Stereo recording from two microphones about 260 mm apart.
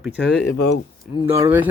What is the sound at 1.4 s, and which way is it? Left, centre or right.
Speech, centre.